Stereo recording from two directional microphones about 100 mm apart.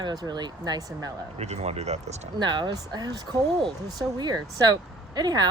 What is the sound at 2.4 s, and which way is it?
Speech, 50° right (ahead or behind).